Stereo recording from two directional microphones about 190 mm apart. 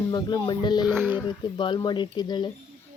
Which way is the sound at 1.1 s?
25° left (ahead or behind).